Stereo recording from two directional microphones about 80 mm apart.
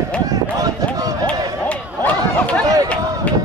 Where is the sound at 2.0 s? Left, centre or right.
Centre.